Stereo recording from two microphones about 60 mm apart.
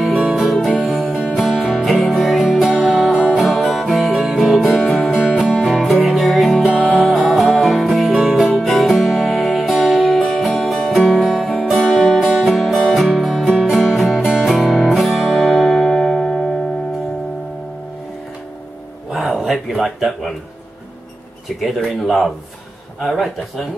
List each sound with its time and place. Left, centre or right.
0.1 s music: centre
0.7 s music: centre
5.2 s music: centre
6.6 s music: centre
7.2 s music: centre
19.1 s a sound: centre
22.0 s speech: centre